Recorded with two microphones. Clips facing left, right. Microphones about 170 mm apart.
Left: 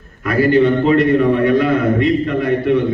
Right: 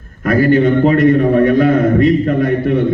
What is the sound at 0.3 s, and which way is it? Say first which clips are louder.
A man's voice: right 2 dB; 45° right (ahead or behind).